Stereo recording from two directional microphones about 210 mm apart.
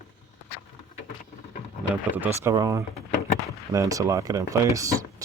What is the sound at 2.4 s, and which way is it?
Speech, 15° right (ahead or behind).